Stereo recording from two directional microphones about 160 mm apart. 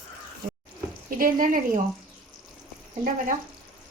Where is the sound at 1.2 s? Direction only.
55° right (ahead or behind).